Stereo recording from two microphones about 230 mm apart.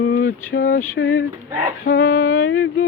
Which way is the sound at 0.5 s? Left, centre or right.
Left.